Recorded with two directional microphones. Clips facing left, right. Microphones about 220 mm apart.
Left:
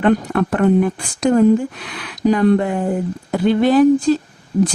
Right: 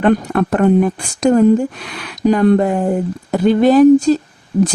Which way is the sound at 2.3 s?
45° right (ahead or behind).